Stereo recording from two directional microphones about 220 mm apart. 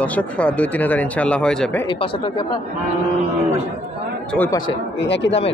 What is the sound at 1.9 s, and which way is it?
Speech, 25° left (ahead or behind).